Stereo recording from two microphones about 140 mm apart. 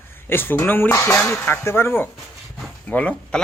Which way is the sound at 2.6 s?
10° left (ahead or behind).